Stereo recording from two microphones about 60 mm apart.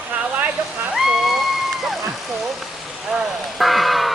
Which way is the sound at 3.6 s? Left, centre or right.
Centre.